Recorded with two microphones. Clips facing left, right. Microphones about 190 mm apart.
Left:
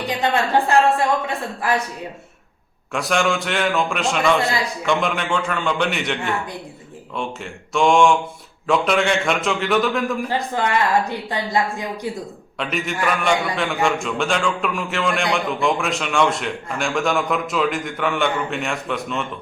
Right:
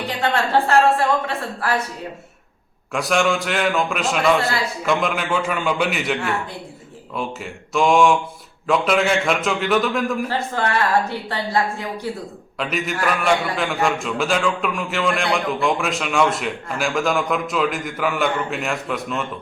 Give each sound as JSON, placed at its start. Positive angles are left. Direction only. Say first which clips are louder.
{"t": 0.2, "sound": "a woman's voice", "louder": "even", "side_deg": 15}
{"t": 2.9, "sound": "a man's voice", "louder": "right 1 dB", "side_deg": 0}
{"t": 10.2, "sound": "a woman's voice", "louder": "left 1 dB", "side_deg": 15}
{"t": 12.5, "sound": "a man's voice", "louder": "even", "side_deg": 0}